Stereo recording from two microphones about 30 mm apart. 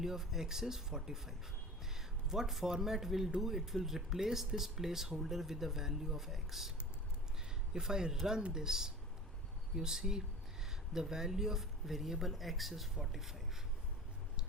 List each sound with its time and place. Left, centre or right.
0.0 s speech: centre
1.8 s a sound: centre
2.5 s speech: centre